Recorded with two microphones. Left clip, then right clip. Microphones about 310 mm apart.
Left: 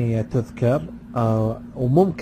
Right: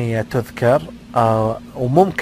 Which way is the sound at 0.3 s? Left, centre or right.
Right.